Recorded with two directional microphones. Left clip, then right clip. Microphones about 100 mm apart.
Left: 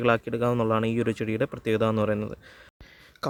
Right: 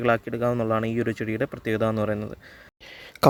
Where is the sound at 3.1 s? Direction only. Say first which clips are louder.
Right 13 dB; 90° right.